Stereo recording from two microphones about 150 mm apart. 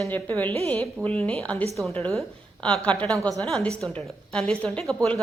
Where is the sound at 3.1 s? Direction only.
20° right (ahead or behind).